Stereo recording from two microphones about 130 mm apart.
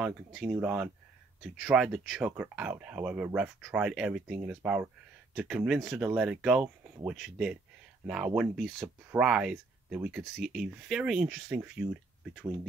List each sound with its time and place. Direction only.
0.0 s speech: 5° right (ahead or behind)